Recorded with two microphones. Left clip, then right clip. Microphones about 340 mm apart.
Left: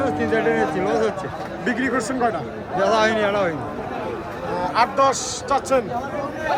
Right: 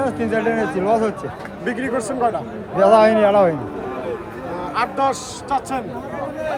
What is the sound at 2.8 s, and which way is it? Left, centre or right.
Speech, centre.